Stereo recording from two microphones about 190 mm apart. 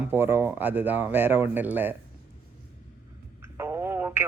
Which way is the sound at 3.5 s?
15° right (ahead or behind).